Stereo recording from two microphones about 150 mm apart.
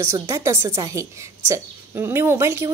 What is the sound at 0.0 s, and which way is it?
A woman's voice, 15° right (ahead or behind).